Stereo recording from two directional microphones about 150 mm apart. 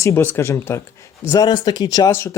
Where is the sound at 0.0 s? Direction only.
15° left (ahead or behind).